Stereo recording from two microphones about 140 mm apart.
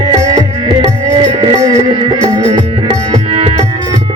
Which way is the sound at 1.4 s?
25° right (ahead or behind).